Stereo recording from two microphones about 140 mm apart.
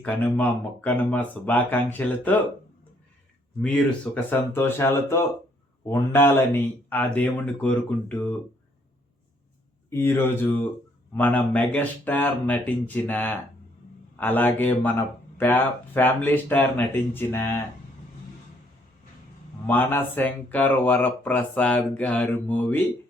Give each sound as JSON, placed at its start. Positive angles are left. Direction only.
{"t": 0.0, "sound": "speech", "side_deg": 10}
{"t": 3.6, "sound": "speech", "side_deg": 10}
{"t": 9.9, "sound": "speech", "side_deg": 15}
{"t": 19.6, "sound": "speech", "side_deg": 15}